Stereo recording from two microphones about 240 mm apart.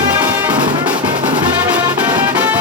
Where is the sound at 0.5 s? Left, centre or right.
Centre.